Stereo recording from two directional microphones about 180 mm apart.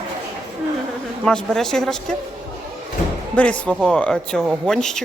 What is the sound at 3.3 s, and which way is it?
Speech, 5° left (ahead or behind).